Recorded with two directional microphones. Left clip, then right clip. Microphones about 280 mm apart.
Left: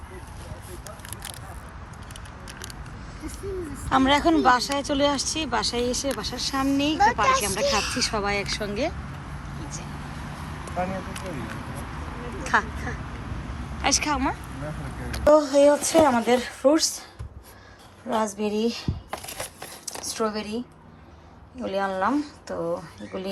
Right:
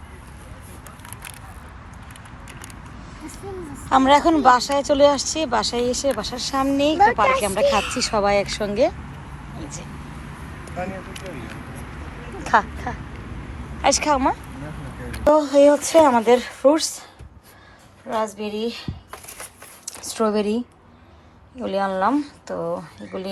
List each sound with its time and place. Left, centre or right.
3.8 s speech: centre
9.6 s vehicle: centre
10.8 s vehicle: left
12.4 s a sound: centre
13.8 s speech: centre
18.1 s speech: centre
20.1 s speech: centre
21.6 s speech: centre